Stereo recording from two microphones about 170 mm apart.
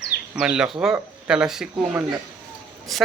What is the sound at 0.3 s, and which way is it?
Speech, 5° right (ahead or behind).